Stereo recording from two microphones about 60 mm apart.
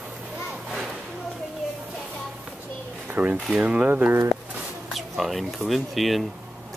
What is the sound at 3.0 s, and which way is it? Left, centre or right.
Speech, right.